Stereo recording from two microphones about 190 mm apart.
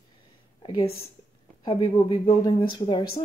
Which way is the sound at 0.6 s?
25° left (ahead or behind).